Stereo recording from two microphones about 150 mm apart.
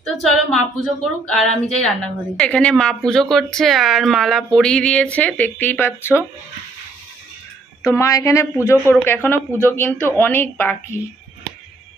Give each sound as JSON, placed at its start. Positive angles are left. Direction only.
{"t": 0.0, "sound": "a woman's voice", "side_deg": 5}
{"t": 7.8, "sound": "a woman's voice", "side_deg": 20}